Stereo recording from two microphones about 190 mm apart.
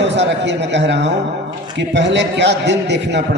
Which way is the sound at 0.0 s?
65° right (ahead or behind).